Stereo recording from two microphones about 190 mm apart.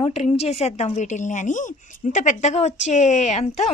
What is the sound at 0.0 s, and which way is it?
A woman's voice, 30° left (ahead or behind).